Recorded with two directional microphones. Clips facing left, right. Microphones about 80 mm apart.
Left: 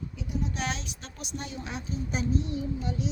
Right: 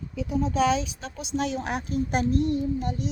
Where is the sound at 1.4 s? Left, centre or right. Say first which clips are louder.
Right 10 dB; right.